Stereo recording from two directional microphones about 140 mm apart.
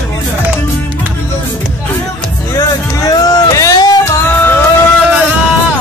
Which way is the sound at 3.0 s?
25° left (ahead or behind).